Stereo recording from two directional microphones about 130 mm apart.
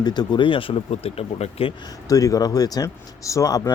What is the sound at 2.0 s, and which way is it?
Speech, 25° left (ahead or behind).